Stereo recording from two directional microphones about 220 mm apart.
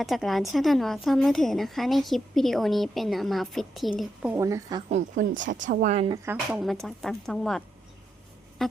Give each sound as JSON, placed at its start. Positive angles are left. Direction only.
{"t": 0.0, "sound": "a woman's voice", "side_deg": 0}
{"t": 4.9, "sound": "speech", "side_deg": -35}
{"t": 6.1, "sound": "speech", "side_deg": -10}
{"t": 6.6, "sound": "a woman's voice", "side_deg": 0}